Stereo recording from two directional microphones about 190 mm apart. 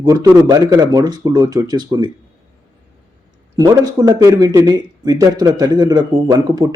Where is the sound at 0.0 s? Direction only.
20° right (ahead or behind).